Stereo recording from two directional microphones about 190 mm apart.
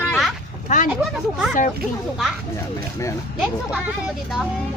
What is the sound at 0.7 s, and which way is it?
Speech, 40° left (ahead or behind).